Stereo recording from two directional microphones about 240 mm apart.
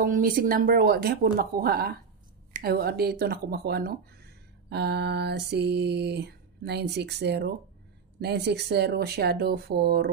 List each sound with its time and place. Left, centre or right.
0.0 s speech: right
4.6 s mantra: right
8.2 s speech: right